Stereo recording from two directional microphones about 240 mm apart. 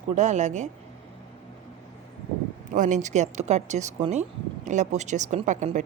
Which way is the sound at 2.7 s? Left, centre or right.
Right.